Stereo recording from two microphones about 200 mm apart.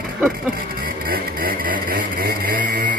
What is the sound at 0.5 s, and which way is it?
Vehicle, 45° right (ahead or behind).